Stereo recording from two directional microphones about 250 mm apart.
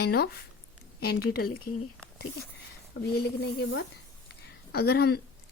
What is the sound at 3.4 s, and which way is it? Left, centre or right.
Speech, left.